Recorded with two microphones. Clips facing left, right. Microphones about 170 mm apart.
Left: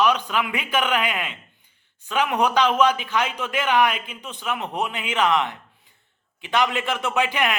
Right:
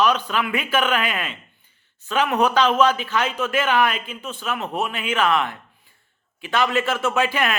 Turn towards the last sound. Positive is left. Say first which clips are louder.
# right 2 dB
turn(degrees=15)  # may be behind; listen again after turning